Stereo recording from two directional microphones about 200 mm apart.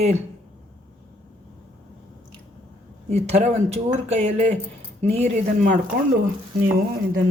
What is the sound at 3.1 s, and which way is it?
Speech, 35° right (ahead or behind).